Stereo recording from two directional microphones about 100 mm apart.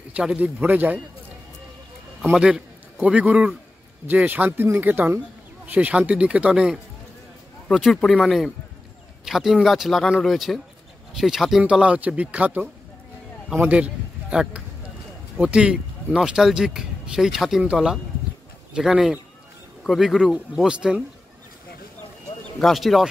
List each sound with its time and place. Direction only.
0.1 s a man's voice: 10° right (ahead or behind)
2.2 s a man's voice: 10° right (ahead or behind)
22.6 s speech: centre (ahead or behind)